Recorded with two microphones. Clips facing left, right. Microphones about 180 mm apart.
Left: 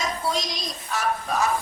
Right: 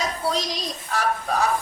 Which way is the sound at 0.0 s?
35° right (ahead or behind).